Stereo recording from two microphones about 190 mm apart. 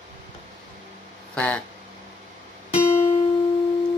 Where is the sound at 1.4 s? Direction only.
5° left (ahead or behind).